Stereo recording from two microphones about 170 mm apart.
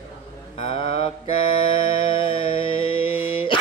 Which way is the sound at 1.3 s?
30° left (ahead or behind).